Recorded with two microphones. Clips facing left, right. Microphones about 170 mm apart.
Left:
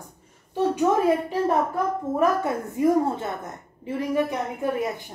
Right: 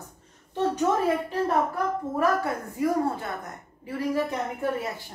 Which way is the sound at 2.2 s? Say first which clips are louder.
Left 2 dB; 20° left (ahead or behind).